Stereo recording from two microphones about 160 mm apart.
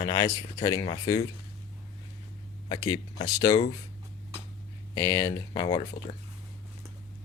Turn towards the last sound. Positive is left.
turn(degrees=30)  # may be behind; listen again after turning